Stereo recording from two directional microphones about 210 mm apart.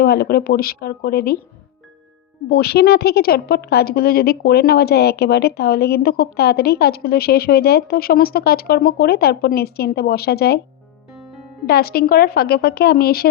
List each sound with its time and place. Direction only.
0.0 s a woman's voice: 45° left (ahead or behind)
2.5 s a woman's voice: 50° left (ahead or behind)
11.6 s a woman's voice: 50° left (ahead or behind)